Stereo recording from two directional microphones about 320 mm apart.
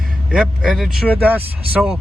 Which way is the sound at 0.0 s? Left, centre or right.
Centre.